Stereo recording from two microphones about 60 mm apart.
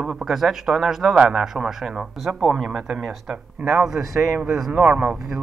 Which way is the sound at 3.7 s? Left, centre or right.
Centre.